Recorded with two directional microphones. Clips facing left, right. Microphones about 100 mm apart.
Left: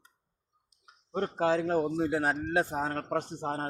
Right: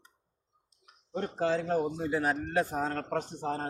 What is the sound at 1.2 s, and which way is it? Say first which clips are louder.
Speech: left 2 dB; 65° left (ahead or behind).